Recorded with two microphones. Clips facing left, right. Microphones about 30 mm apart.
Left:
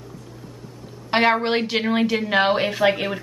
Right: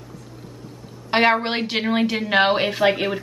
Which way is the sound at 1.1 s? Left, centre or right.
Centre.